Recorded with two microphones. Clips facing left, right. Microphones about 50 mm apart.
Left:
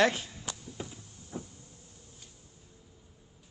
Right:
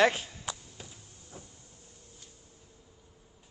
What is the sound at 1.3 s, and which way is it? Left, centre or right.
Power windows, left.